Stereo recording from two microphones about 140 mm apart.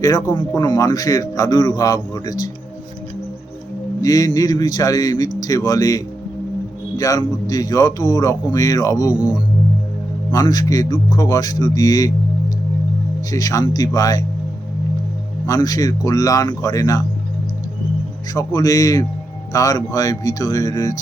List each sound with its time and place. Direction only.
0.0 s a man's voice: 25° left (ahead or behind)
4.0 s a man's voice: 25° left (ahead or behind)
9.1 s speech: 5° right (ahead or behind)
10.4 s a man's voice: 25° left (ahead or behind)
13.3 s a man's voice: 25° left (ahead or behind)
15.4 s a man's voice: 25° left (ahead or behind)
18.3 s a man's voice: 25° left (ahead or behind)